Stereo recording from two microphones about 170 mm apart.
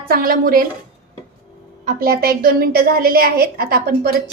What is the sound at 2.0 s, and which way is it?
A woman's voice, 65° right (ahead or behind).